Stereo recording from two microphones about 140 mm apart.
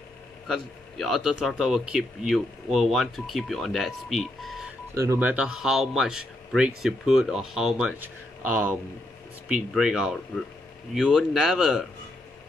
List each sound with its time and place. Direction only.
0.5 s speech: centre (ahead or behind)
4.9 s speech: 20° right (ahead or behind)
5.3 s speech: 5° right (ahead or behind)